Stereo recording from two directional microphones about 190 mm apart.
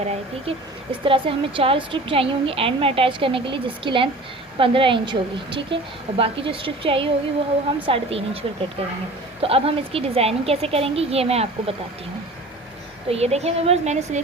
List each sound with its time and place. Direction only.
0.0 s a woman's voice: 35° right (ahead or behind)
13.1 s a woman's voice: 35° right (ahead or behind)